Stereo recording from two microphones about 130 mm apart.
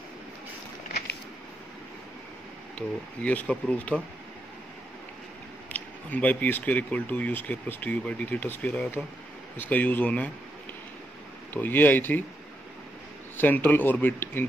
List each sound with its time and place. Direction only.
3.2 s speech: 10° left (ahead or behind)
5.7 s speech: 10° left (ahead or behind)
11.5 s speech: 15° left (ahead or behind)
13.4 s speech: 15° left (ahead or behind)